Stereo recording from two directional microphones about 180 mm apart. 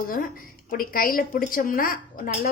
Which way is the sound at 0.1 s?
50° left (ahead or behind).